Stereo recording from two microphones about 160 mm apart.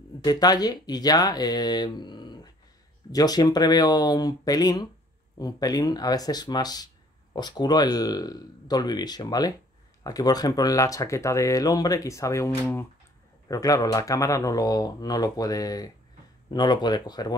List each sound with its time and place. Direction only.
0.2 s speech: 25° left (ahead or behind)